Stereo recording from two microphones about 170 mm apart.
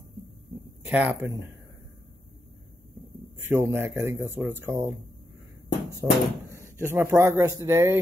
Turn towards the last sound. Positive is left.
turn(degrees=-15)  # may be behind; listen again after turning